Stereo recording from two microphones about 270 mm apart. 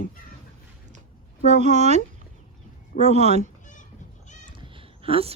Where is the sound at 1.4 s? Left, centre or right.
Right.